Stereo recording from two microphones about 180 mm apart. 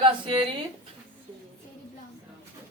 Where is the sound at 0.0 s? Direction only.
30° right (ahead or behind).